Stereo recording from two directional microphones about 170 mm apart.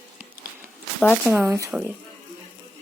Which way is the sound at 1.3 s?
15° right (ahead or behind).